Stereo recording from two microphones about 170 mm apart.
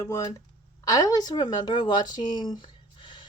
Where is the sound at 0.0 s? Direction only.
20° left (ahead or behind).